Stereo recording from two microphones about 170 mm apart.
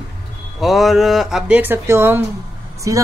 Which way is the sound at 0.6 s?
Centre (ahead or behind).